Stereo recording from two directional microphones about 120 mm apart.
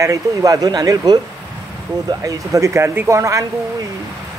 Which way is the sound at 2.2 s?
30° right (ahead or behind).